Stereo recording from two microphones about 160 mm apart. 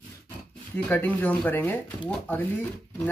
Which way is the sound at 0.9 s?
10° left (ahead or behind).